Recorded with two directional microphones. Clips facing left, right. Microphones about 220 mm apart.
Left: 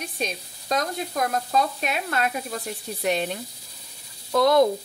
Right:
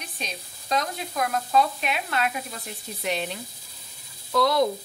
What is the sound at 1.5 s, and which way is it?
Sizzle, 40° left (ahead or behind).